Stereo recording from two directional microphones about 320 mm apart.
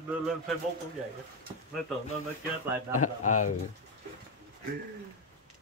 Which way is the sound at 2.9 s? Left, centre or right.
Left.